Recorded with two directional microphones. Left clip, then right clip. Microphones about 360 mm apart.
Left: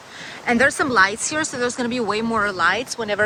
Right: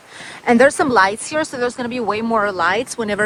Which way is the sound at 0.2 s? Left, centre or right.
Centre.